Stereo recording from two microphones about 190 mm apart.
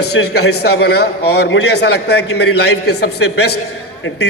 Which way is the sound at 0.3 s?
60° left (ahead or behind).